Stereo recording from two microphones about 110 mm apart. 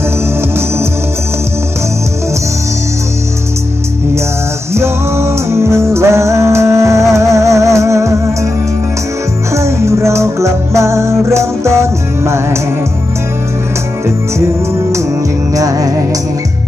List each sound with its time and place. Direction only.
4.7 s music: 25° right (ahead or behind)
9.5 s music: 25° right (ahead or behind)
15.5 s music: 30° right (ahead or behind)